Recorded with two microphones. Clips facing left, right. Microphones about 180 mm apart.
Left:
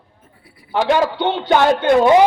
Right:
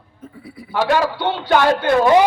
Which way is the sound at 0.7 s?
20° left (ahead or behind).